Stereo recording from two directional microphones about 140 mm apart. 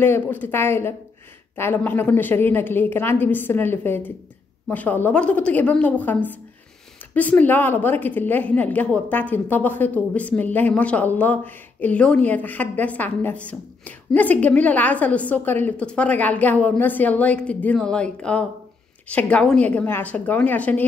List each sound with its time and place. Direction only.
0.0 s a woman's voice: 15° left (ahead or behind)